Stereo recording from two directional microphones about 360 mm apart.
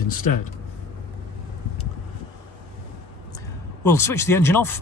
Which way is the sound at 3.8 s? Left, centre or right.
Centre.